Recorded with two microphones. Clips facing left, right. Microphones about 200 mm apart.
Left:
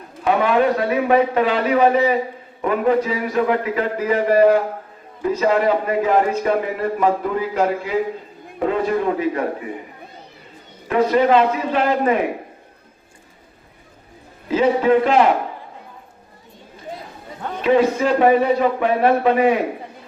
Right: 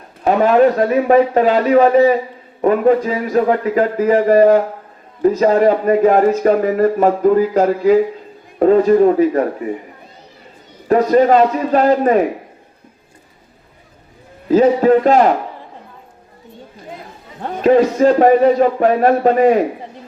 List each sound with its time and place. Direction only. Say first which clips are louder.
0.3 s speech: right 5 dB; 40° right (ahead or behind)
10.8 s speech: right 5 dB; 40° right (ahead or behind)
14.4 s speech: right 5 dB; 40° right (ahead or behind)
17.4 s speech: right 4 dB; 40° right (ahead or behind)